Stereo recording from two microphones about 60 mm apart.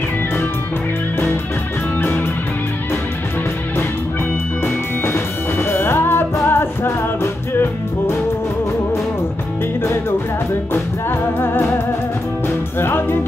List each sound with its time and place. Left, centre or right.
2.0 s music: left
4.6 s music: left
10.7 s music: left
12.7 s music: left